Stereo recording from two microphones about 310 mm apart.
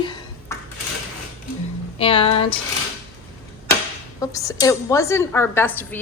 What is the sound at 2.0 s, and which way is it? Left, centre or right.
Speech, centre.